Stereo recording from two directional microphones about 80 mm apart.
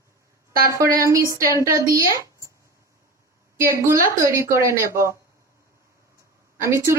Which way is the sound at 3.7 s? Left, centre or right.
Right.